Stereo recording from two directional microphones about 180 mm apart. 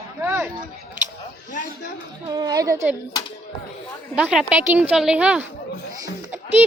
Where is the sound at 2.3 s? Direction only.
20° right (ahead or behind).